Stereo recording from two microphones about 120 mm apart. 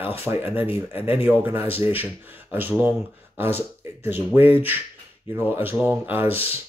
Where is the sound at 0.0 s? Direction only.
20° right (ahead or behind).